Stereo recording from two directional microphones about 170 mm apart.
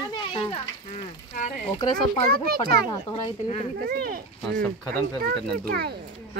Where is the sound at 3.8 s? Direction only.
60° right (ahead or behind).